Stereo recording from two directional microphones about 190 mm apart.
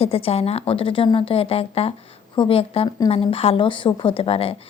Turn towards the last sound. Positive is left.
turn(degrees=30)  # may be behind; listen again after turning